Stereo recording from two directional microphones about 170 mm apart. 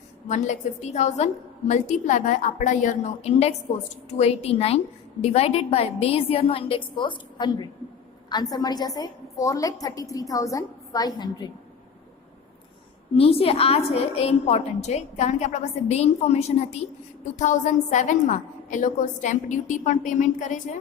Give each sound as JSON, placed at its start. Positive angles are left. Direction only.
{"t": 0.3, "sound": "a woman's voice", "side_deg": 45}
{"t": 13.1, "sound": "a woman's voice", "side_deg": 35}